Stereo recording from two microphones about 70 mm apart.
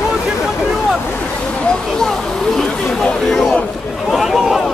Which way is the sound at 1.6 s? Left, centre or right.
Centre.